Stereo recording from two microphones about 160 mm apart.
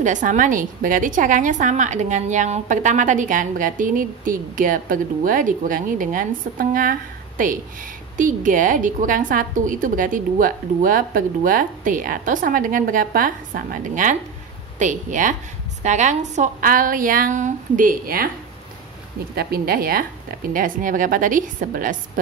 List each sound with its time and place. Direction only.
0.0 s a woman's voice: 50° right (ahead or behind)
19.3 s a woman's voice: 70° right (ahead or behind)